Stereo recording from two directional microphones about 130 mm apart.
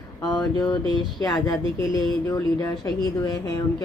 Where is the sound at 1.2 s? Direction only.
30° left (ahead or behind).